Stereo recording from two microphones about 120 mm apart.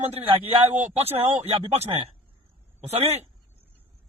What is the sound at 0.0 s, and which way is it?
Speech, 55° right (ahead or behind).